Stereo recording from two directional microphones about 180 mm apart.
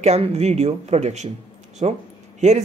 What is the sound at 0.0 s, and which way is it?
A man's voice, 35° right (ahead or behind).